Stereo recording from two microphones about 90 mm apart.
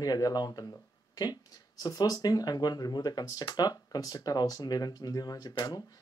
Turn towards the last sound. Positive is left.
turn(degrees=50)  # may be behind; listen again after turning